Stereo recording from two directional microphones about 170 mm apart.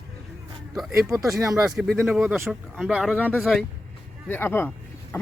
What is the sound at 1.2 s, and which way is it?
Speech, centre (ahead or behind).